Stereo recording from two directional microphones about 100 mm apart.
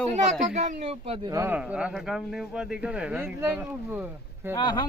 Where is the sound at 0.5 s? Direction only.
90° right.